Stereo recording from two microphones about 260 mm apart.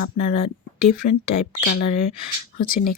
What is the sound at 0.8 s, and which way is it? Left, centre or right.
Speech, left.